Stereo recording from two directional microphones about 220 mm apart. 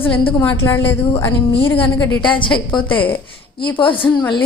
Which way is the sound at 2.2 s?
20° left (ahead or behind).